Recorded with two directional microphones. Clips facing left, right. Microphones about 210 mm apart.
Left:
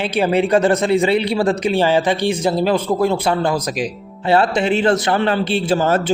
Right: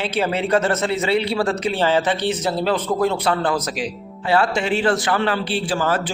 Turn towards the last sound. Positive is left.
turn(degrees=25)  # may be behind; listen again after turning